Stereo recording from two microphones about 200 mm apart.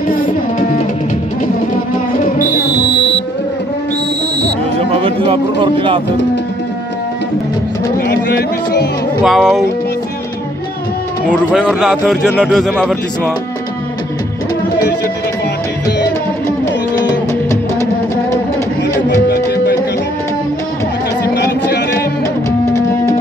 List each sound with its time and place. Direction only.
2.2 s music: 45° left (ahead or behind)
4.7 s music: 30° right (ahead or behind)
8.1 s speech: 55° left (ahead or behind)
9.2 s a man's voice: centre (ahead or behind)
11.2 s a man's voice: 5° left (ahead or behind)
17.0 s music: 15° left (ahead or behind)
19.0 s music: 55° left (ahead or behind)
21.4 s music: 55° left (ahead or behind)
22.7 s music: 15° left (ahead or behind)